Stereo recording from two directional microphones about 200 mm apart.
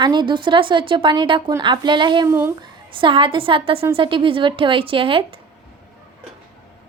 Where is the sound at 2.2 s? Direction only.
10° right (ahead or behind).